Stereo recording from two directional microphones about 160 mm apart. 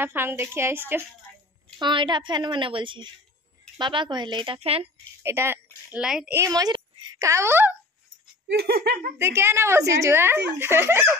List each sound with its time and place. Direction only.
0.0 s a woman's voice: 15° right (ahead or behind)
1.8 s a woman's voice: 30° right (ahead or behind)
5.2 s a woman's voice: 15° right (ahead or behind)
5.9 s a woman's voice: 5° right (ahead or behind)
6.3 s a child's voice: 20° right (ahead or behind)
8.5 s laughter: 80° right
9.2 s a woman's voice: 15° right (ahead or behind)